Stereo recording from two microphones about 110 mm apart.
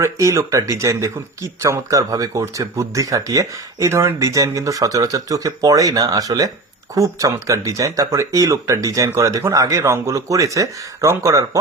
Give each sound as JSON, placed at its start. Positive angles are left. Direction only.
{"t": 0.0, "sound": "speech", "side_deg": -25}